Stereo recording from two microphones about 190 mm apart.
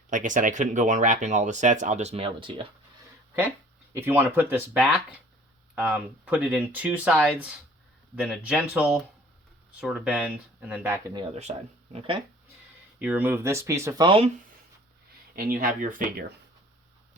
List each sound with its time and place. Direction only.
0.1 s speech: 40° right (ahead or behind)
3.9 s speech: 10° right (ahead or behind)
11.5 s speech: 35° right (ahead or behind)
13.0 s speech: 10° right (ahead or behind)
15.4 s speech: 50° right (ahead or behind)